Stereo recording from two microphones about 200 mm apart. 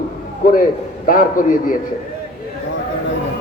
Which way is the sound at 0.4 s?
45° left (ahead or behind).